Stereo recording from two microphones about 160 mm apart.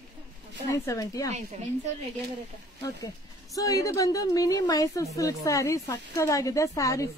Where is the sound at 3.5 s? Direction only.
20° left (ahead or behind).